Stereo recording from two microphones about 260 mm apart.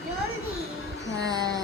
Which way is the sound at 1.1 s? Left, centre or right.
Centre.